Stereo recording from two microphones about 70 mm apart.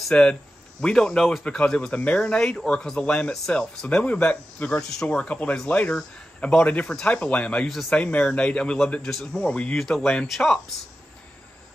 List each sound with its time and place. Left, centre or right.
0.1 s speech: centre
7.6 s a man's voice: centre
8.0 s a man's voice: centre
9.5 s speech: centre
9.8 s a man's voice: centre